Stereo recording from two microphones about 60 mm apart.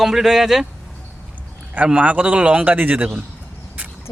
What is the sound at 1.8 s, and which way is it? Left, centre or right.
A man's voice, right.